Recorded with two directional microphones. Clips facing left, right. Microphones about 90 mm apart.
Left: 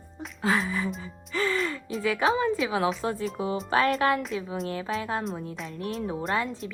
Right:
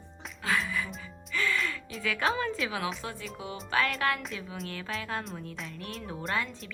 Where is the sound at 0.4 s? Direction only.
30° left (ahead or behind).